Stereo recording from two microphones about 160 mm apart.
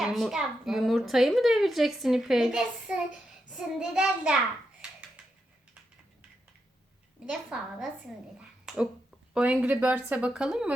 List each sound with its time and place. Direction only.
0.0 s a child's voice: centre (ahead or behind)
7.3 s a child's voice: 5° right (ahead or behind)